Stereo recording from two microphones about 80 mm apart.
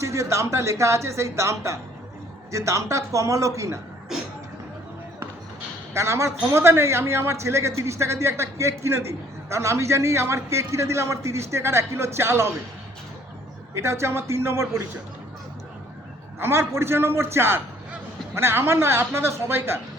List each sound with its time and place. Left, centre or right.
0.0 s a man's voice: right
5.9 s a man's voice: right
13.7 s a man's voice: right
16.4 s a man's voice: right